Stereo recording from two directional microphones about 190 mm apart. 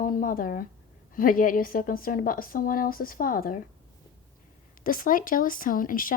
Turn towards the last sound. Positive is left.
turn(degrees=45)  # may be behind; listen again after turning